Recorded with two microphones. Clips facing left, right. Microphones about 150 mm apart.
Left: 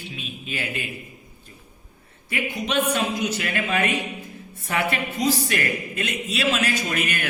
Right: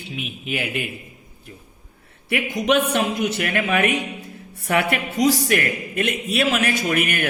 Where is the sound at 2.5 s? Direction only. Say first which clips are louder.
Right 11 dB; 90° right.